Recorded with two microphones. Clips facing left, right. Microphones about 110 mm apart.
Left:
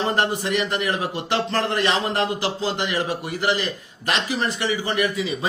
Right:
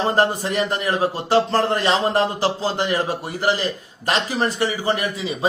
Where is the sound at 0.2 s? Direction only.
40° right (ahead or behind).